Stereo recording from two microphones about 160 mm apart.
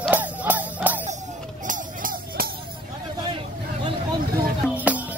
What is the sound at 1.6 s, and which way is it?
Music, 55° right (ahead or behind).